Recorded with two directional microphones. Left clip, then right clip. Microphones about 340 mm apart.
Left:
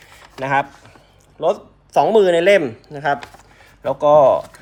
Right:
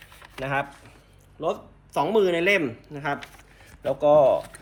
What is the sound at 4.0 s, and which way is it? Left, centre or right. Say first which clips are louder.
Speech: left 6 dB; left.